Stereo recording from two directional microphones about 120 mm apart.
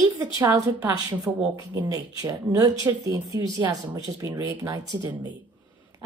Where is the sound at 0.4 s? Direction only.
25° right (ahead or behind).